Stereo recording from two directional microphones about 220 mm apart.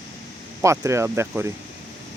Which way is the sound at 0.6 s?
15° right (ahead or behind).